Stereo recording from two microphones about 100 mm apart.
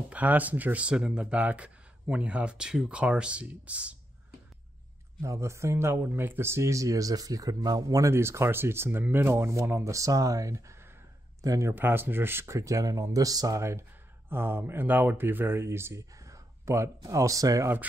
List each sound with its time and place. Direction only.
0.1 s speech: 15° right (ahead or behind)
5.2 s speech: 30° right (ahead or behind)
9.3 s speech: 30° right (ahead or behind)
11.7 s speech: 20° right (ahead or behind)